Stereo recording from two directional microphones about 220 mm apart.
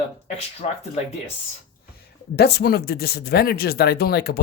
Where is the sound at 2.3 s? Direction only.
50° left (ahead or behind).